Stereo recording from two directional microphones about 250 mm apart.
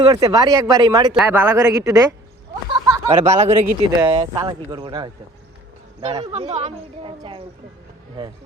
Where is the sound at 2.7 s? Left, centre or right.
Centre.